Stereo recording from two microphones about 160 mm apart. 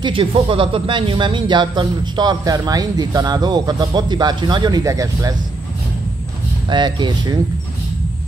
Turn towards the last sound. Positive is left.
turn(degrees=-25)  # may be behind; listen again after turning